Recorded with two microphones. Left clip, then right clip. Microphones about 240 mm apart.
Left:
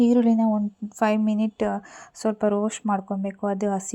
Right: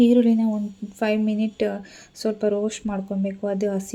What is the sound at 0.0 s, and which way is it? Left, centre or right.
Speech, left.